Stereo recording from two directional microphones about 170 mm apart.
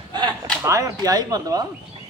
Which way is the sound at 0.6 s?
15° right (ahead or behind).